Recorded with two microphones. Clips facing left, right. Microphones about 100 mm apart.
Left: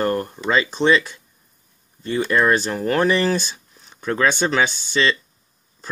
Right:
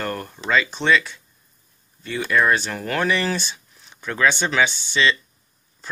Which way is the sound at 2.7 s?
30° left (ahead or behind).